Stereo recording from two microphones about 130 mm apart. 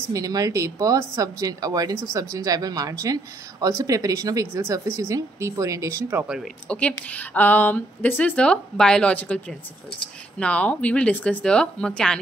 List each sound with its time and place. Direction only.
0.1 s speech: 25° right (ahead or behind)
6.2 s speech: 5° right (ahead or behind)
6.7 s a woman's voice: 10° left (ahead or behind)